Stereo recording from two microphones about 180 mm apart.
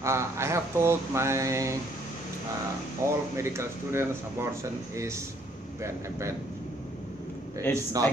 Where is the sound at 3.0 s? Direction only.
15° right (ahead or behind).